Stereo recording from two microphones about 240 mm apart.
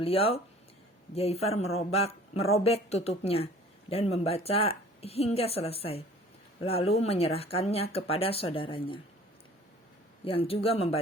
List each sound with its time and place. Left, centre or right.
0.0 s speech: left
10.2 s speech: left